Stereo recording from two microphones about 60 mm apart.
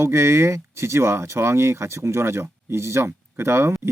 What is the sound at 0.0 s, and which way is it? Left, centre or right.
Speech, right.